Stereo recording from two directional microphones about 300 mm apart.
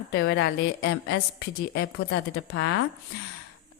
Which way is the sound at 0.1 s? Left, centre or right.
Left.